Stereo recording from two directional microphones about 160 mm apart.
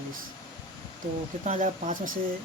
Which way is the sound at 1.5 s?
50° right (ahead or behind).